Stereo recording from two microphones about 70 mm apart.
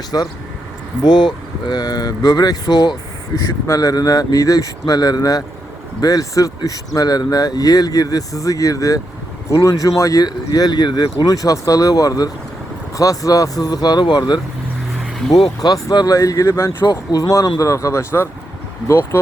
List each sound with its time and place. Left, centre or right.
0.1 s speech: left
1.0 s speech: left
3.3 s speech: left
15.6 s speech: left
16.8 s speech: left